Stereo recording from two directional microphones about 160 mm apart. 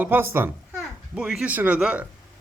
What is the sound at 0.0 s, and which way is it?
Speech, 15° right (ahead or behind).